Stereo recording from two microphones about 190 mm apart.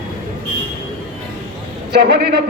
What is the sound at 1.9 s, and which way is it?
Speech, 55° right (ahead or behind).